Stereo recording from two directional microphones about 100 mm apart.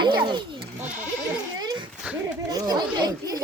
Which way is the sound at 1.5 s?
45° right (ahead or behind).